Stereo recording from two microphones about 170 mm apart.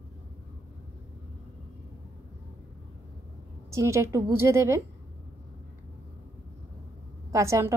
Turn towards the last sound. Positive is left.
turn(degrees=-15)  # may be behind; listen again after turning